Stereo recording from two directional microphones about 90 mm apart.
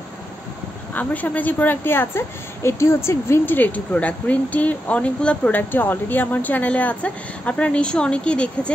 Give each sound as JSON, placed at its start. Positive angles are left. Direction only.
{"t": 0.9, "sound": "a woman's voice", "side_deg": 20}